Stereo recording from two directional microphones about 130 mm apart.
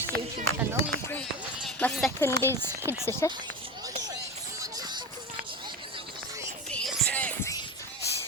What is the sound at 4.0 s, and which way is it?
Music, 25° right (ahead or behind).